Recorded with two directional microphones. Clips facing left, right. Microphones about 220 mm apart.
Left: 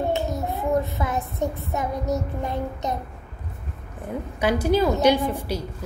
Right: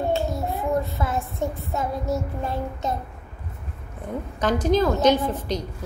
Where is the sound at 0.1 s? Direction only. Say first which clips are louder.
Right 1 dB; 20° left (ahead or behind).